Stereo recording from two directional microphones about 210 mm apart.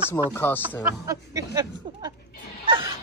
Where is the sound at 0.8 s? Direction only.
15° right (ahead or behind).